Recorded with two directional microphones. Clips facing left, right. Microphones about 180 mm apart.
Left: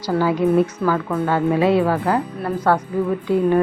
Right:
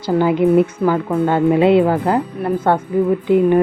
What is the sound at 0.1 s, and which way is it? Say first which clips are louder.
A woman's voice: right 4 dB; 20° right (ahead or behind).